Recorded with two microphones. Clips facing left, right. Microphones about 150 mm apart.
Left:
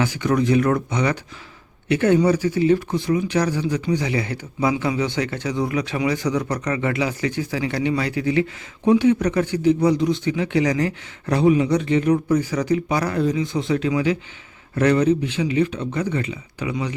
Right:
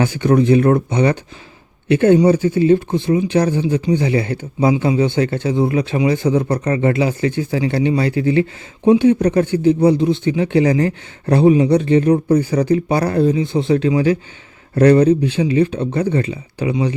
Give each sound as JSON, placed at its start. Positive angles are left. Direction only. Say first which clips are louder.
{"t": 0.0, "sound": "speech", "louder": "right 6 dB", "side_deg": -30}